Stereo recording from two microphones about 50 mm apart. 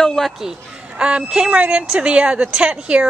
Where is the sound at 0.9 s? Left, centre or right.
Right.